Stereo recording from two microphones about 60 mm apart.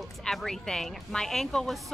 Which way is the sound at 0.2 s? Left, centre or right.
Centre.